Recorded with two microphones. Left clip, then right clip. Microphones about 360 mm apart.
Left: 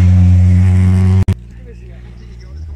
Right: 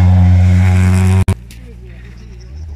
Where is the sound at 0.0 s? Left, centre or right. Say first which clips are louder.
Right 1 dB; right.